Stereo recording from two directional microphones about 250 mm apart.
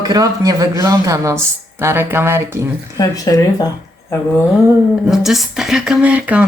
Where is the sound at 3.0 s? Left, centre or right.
Centre.